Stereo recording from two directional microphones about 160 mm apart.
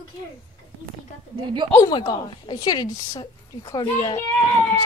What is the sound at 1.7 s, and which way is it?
Speech, 20° left (ahead or behind).